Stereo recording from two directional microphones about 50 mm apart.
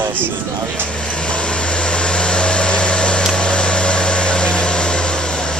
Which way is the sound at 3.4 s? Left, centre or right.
Centre.